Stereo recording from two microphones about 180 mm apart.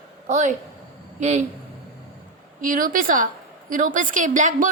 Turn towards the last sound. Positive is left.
turn(degrees=-45)  # may be behind; listen again after turning